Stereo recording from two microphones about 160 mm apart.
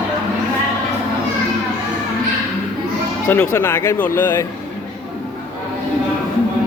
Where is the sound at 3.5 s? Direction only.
15° left (ahead or behind).